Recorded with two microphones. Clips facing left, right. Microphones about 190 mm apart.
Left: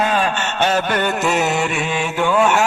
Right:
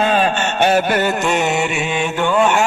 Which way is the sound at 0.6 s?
10° right (ahead or behind).